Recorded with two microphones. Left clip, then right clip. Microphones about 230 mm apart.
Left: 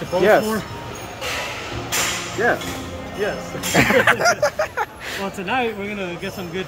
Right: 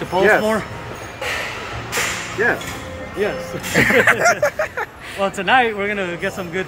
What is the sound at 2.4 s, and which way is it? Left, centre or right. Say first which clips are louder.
Speech: right 1 dB; centre.